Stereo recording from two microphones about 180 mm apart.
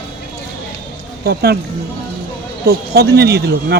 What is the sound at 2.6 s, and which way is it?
Speech, 65° right (ahead or behind).